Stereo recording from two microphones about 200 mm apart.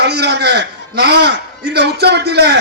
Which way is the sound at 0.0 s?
55° right (ahead or behind).